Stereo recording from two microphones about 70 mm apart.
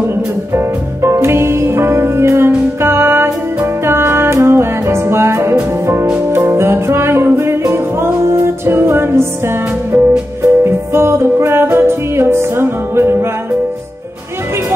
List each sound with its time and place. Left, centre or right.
0.5 s music: right